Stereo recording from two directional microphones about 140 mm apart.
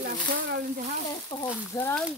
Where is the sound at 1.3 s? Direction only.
35° left (ahead or behind).